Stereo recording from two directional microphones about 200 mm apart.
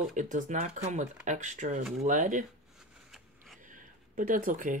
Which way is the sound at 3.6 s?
40° right (ahead or behind).